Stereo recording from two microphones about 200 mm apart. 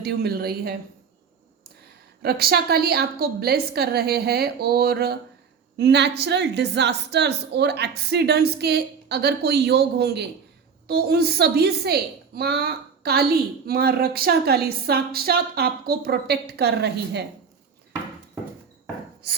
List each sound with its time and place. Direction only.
0.0 s a woman's voice: 50° right (ahead or behind)
2.2 s a woman's voice: 50° right (ahead or behind)